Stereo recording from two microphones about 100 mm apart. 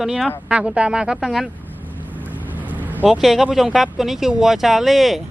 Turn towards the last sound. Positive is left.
turn(degrees=0)  # may be behind; listen again after turning